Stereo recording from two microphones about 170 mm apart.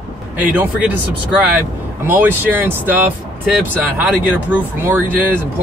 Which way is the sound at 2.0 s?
10° right (ahead or behind).